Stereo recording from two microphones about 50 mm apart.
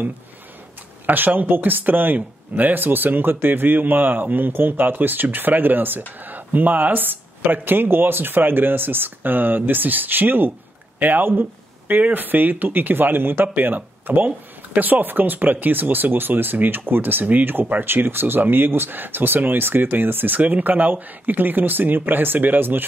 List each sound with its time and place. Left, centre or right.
1.0 s speech: right